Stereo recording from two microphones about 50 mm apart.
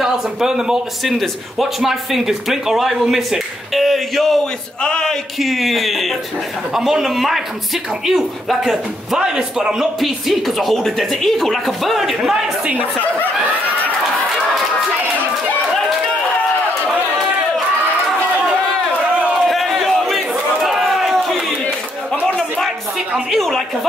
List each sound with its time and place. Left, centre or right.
0.0 s a man's voice: centre
9.2 s a man's voice: centre
9.9 s speech: centre
12.2 s a man's voice: centre
19.3 s crowd: centre
23.3 s a sound: centre